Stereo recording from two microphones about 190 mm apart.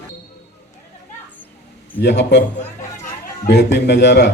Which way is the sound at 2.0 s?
60° left (ahead or behind).